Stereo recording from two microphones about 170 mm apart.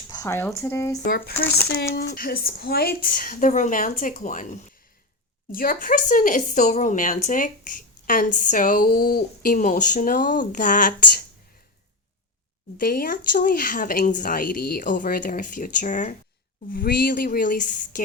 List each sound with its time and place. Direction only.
0.1 s speech: 20° left (ahead or behind)
1.0 s a woman's voice: 65° left (ahead or behind)
1.3 s speech: 10° left (ahead or behind)
2.0 s a woman's voice: 65° left (ahead or behind); by 4.4 s 50° left (ahead or behind)
5.5 s speech: 55° left (ahead or behind)
12.7 s speech: 60° left (ahead or behind)
16.7 s a woman's voice: 60° left (ahead or behind)